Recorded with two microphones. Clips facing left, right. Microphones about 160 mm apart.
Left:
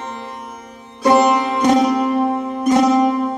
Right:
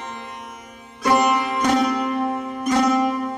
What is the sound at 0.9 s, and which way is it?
Music, 30° left (ahead or behind).